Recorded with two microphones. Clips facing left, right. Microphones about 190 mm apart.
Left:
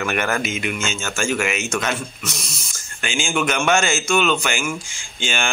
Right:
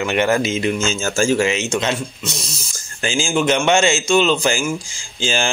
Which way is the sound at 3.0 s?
40° right (ahead or behind).